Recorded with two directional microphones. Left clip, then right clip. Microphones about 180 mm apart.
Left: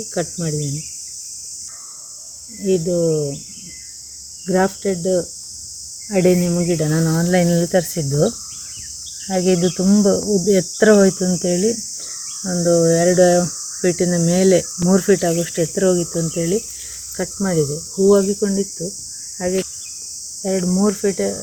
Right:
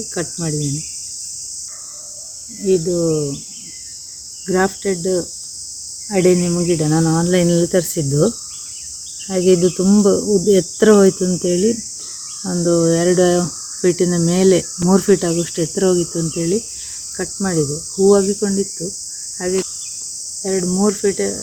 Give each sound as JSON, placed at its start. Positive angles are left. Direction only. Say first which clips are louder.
{"t": 0.1, "sound": "cricket", "louder": "left 2 dB", "side_deg": -15}
{"t": 2.6, "sound": "cricket", "louder": "right 1 dB", "side_deg": -15}
{"t": 4.4, "sound": "cricket", "louder": "right 1 dB", "side_deg": -15}
{"t": 9.3, "sound": "cricket", "louder": "right 3 dB", "side_deg": -15}